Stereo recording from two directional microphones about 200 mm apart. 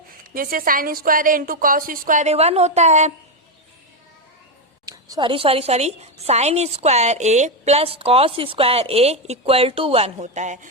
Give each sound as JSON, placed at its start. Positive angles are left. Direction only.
{"t": 0.3, "sound": "a woman's voice", "side_deg": -45}
{"t": 4.9, "sound": "a woman's voice", "side_deg": -20}